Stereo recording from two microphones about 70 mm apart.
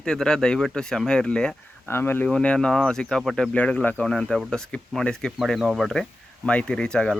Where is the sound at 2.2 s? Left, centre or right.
Centre.